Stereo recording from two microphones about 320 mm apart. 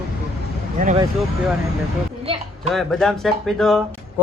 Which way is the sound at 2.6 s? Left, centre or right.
Centre.